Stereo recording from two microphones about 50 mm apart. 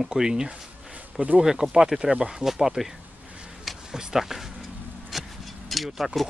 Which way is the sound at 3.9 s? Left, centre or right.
Centre.